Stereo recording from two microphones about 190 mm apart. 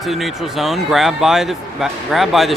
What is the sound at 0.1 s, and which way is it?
A man's voice, centre (ahead or behind).